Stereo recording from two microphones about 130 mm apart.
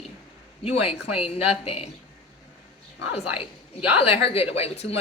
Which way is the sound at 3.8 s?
45° left (ahead or behind).